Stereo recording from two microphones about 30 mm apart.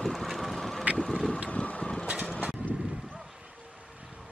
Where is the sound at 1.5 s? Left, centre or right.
Left.